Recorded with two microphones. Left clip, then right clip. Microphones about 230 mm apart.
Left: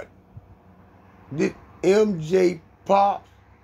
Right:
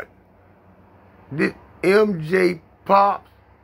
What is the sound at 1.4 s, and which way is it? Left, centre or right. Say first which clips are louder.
Speech: right 2 dB; centre.